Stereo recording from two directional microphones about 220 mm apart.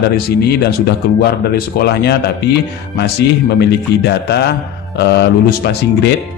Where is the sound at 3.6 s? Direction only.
50° left (ahead or behind).